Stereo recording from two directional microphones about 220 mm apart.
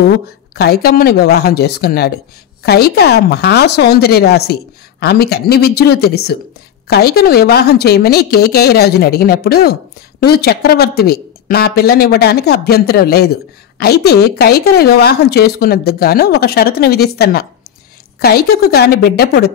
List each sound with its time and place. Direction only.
0.6 s a woman's voice: 45° left (ahead or behind)